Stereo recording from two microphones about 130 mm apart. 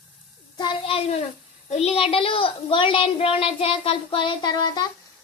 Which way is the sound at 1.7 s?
55° left (ahead or behind).